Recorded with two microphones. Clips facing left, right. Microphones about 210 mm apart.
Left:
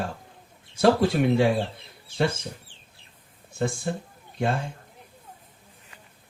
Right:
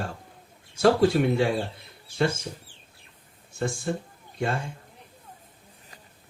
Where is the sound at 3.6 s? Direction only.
50° right (ahead or behind).